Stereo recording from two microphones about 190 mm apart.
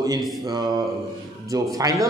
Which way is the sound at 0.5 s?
20° right (ahead or behind).